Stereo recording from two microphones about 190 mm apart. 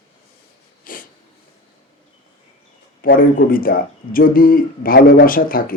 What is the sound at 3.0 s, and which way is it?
Speech, 45° left (ahead or behind).